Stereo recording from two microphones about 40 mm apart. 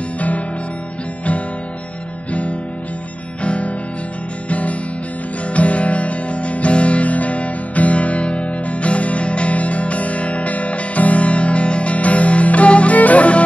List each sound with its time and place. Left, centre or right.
3.4 s music: left